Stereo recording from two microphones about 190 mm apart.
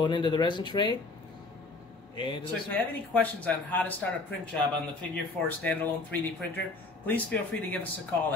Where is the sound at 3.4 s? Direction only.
10° left (ahead or behind).